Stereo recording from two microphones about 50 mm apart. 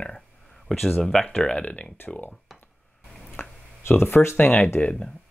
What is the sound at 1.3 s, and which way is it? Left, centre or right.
Speech, centre.